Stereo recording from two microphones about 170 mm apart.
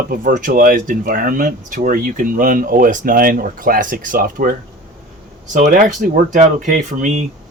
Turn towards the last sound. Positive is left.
turn(degrees=-45)  # may be behind; listen again after turning